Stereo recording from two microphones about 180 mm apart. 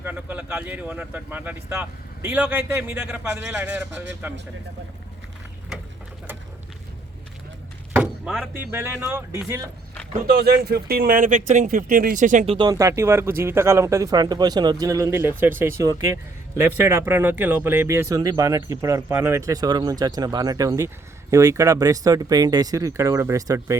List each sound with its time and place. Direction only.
0.0 s speech: 10° right (ahead or behind)
7.9 s speech: 5° right (ahead or behind)
10.2 s speech: 60° right (ahead or behind); by 12.5 s 45° right (ahead or behind)
12.5 s speech: 20° right (ahead or behind)